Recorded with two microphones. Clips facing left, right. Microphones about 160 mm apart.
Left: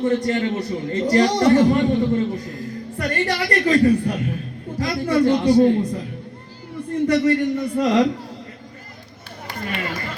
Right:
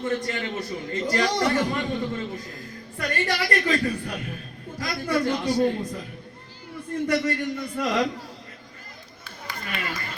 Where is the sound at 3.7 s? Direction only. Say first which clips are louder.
Left 9 dB; 30° left (ahead or behind).